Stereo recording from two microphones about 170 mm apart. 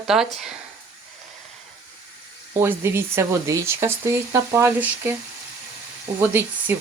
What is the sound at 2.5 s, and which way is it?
Speech, 15° right (ahead or behind).